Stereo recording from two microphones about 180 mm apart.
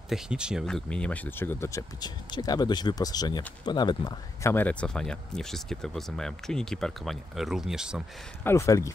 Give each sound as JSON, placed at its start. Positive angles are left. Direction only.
{"t": 0.1, "sound": "speech", "side_deg": -5}
{"t": 8.5, "sound": "speech", "side_deg": 15}